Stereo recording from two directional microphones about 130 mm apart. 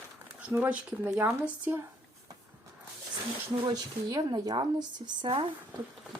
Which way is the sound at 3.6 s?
30° right (ahead or behind).